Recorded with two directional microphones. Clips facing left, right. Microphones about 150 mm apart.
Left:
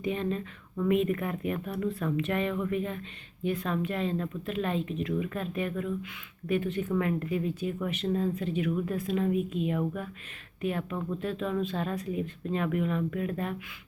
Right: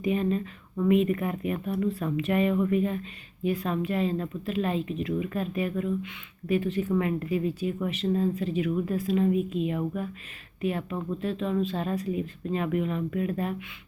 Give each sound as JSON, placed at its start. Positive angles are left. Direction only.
{"t": 0.0, "sound": "speech", "side_deg": -10}